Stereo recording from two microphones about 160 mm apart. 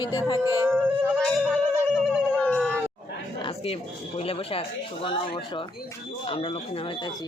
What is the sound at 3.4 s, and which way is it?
Speech, 35° left (ahead or behind).